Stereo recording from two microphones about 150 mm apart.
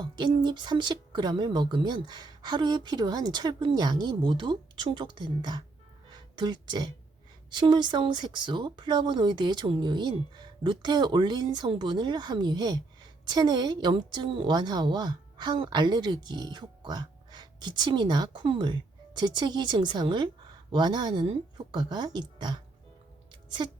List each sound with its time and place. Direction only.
0.0 s a woman's voice: 30° right (ahead or behind)